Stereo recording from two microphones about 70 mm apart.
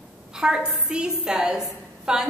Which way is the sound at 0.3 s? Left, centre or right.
Centre.